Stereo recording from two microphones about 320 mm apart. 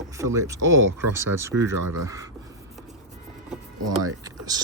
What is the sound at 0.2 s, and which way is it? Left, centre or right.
Speech, centre.